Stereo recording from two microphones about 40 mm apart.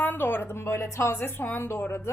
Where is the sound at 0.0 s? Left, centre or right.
Left.